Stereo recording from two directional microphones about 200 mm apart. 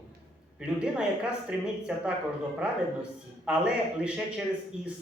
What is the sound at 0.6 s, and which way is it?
A man's voice, 5° right (ahead or behind).